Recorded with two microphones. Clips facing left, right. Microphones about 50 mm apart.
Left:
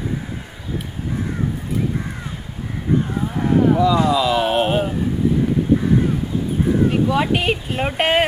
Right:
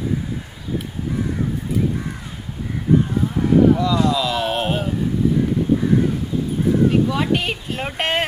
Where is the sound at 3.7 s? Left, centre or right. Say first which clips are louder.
Left 2 dB; centre.